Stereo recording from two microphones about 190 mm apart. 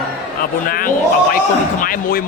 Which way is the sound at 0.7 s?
50° left (ahead or behind).